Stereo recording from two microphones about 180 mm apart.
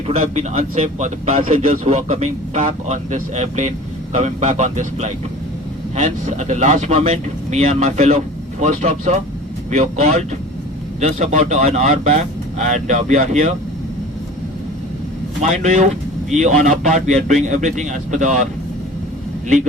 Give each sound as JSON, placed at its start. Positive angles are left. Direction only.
{"t": 0.2, "sound": "a man's voice", "side_deg": -40}
{"t": 15.4, "sound": "a man's voice", "side_deg": -40}